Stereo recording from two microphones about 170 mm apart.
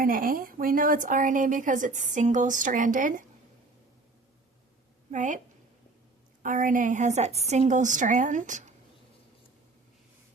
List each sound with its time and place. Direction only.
0.0 s a woman's voice: 55° right (ahead or behind)
5.1 s a woman's voice: 45° right (ahead or behind)
6.4 s a woman's voice: 50° right (ahead or behind)